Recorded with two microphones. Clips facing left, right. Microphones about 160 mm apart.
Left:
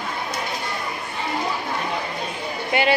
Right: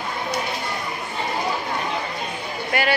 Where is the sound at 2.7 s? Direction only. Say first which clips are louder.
Left 2 dB; 25° left (ahead or behind).